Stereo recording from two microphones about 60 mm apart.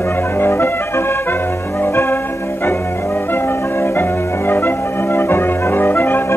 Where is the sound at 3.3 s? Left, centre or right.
Left.